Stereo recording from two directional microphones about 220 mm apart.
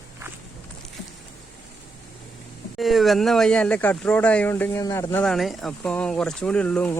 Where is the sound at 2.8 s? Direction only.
Centre (ahead or behind).